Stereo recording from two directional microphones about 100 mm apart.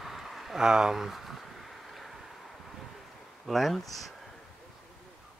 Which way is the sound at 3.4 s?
Centre (ahead or behind).